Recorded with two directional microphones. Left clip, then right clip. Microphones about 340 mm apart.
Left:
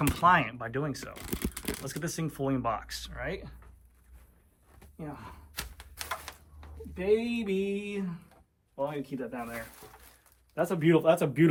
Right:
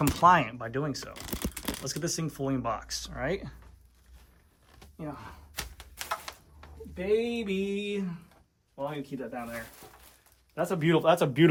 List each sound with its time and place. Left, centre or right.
0.1 s speech: centre
4.9 s door: centre
8.7 s speech: centre